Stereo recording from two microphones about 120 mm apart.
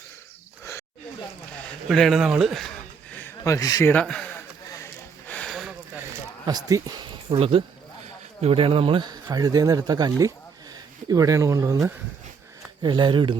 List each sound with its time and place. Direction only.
0.6 s wild animals: 25° left (ahead or behind)
1.9 s a sound: centre (ahead or behind)
3.4 s speech: 30° left (ahead or behind)
4.0 s speech: 10° left (ahead or behind)
5.3 s a sound: 5° left (ahead or behind)
6.4 s speech: 30° right (ahead or behind)
9.2 s speech: 30° right (ahead or behind)
12.8 s speech: 40° right (ahead or behind)